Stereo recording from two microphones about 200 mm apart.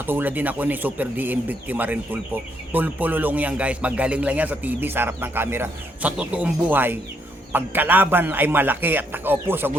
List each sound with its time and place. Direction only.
0.0 s speech: 10° right (ahead or behind)